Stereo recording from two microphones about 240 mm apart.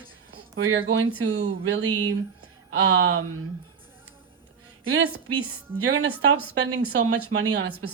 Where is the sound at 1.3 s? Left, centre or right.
Right.